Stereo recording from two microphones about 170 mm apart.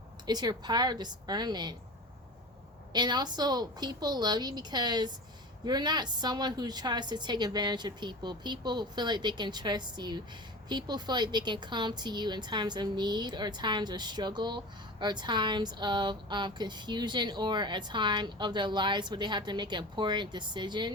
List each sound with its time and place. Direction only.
0.3 s speech: 25° right (ahead or behind)
2.9 s speech: 25° right (ahead or behind)